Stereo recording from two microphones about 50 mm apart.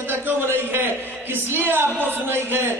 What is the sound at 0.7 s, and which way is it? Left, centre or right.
A man's voice, right.